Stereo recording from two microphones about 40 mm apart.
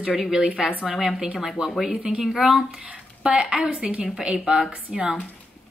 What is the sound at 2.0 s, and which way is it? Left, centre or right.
Speech, centre.